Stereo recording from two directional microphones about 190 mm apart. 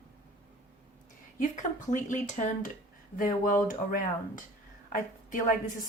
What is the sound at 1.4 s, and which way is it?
Speech, 40° left (ahead or behind).